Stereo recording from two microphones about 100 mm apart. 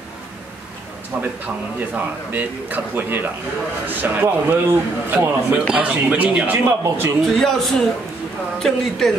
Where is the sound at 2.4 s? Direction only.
20° right (ahead or behind).